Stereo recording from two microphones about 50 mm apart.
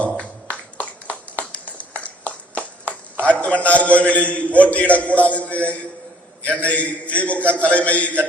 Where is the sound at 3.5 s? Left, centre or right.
Left.